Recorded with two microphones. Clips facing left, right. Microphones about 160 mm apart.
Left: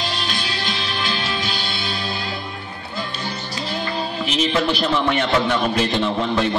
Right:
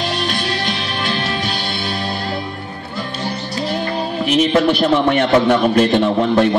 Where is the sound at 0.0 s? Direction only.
60° right (ahead or behind).